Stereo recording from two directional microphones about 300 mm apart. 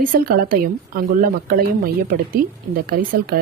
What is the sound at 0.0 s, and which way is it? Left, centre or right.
A woman's voice, right.